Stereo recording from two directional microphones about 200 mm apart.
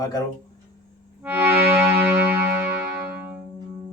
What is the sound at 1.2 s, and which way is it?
Music, 10° right (ahead or behind).